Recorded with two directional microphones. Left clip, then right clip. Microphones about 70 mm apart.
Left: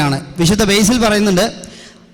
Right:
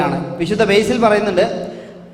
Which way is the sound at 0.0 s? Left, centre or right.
Left.